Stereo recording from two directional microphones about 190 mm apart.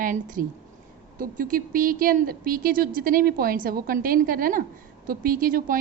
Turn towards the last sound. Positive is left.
turn(degrees=-45)  # may be behind; listen again after turning